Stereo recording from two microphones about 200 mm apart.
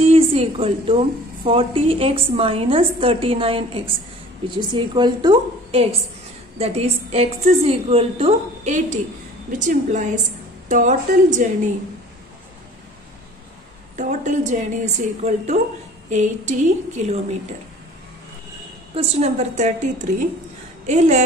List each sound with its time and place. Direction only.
0.0 s a woman's voice: 30° right (ahead or behind)
13.9 s a woman's voice: 35° right (ahead or behind)
18.9 s a woman's voice: 30° right (ahead or behind)